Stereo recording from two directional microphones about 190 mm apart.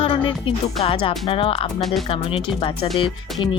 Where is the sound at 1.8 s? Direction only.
Centre (ahead or behind).